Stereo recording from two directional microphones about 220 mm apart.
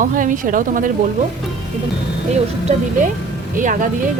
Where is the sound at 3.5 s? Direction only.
35° right (ahead or behind).